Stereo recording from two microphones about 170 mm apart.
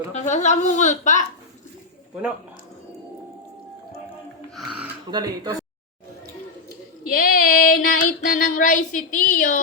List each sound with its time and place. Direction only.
0.1 s child singing: 45° left (ahead or behind)
4.5 s speech: 5° right (ahead or behind)
5.1 s speech: 25° right (ahead or behind)
7.1 s child singing: 55° left (ahead or behind)